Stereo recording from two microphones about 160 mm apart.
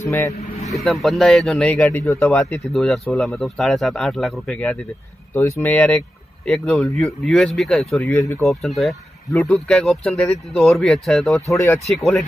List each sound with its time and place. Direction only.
0.0 s speech: 20° left (ahead or behind)
0.7 s speech: centre (ahead or behind)
1.9 s speech: 20° left (ahead or behind)
2.4 s speech: centre (ahead or behind)
5.3 s speech: 15° left (ahead or behind)
8.1 s speech: 20° left (ahead or behind)
8.5 s speech: centre (ahead or behind)
11.4 s speech: 20° left (ahead or behind)
11.8 s speech: centre (ahead or behind)